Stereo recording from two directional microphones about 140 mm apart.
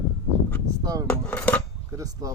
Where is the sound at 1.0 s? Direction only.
10° left (ahead or behind).